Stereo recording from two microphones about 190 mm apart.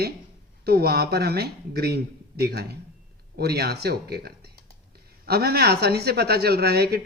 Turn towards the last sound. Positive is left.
turn(degrees=-55)  # may be behind; listen again after turning